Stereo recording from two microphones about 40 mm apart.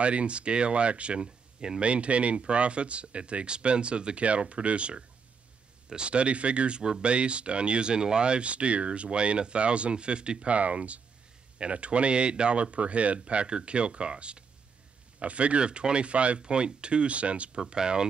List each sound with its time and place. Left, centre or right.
0.0 s speech: right
17.6 s speech: centre